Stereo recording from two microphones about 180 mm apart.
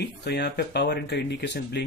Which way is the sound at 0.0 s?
70° left (ahead or behind).